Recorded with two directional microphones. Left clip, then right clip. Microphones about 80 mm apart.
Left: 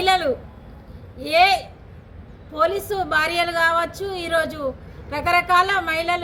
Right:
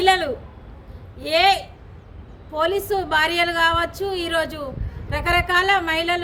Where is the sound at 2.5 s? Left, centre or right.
Right.